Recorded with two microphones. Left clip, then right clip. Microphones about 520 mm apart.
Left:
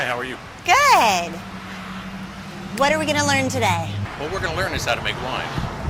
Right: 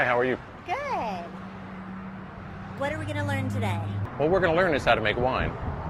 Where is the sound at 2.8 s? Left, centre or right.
Left.